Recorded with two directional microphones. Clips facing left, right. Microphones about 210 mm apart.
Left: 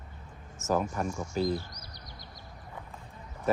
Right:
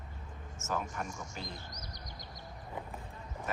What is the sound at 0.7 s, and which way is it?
Speech, 40° left (ahead or behind).